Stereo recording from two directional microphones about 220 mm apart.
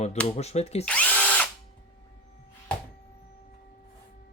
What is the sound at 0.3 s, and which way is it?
Speech, 30° left (ahead or behind).